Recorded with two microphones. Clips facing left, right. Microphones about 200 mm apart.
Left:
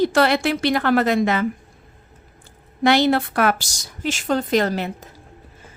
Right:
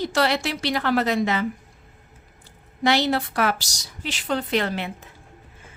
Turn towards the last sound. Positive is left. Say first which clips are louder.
# left 5 dB
turn(degrees=40)  # may be behind; listen again after turning